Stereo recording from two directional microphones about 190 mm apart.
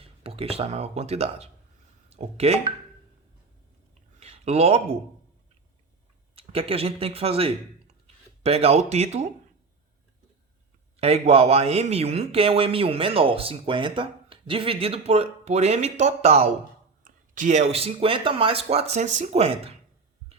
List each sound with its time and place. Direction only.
0.0 s a man's voice: 30° right (ahead or behind)
4.2 s a sound: 35° right (ahead or behind)
6.3 s a man's voice: 30° right (ahead or behind)
11.0 s a man's voice: 30° right (ahead or behind)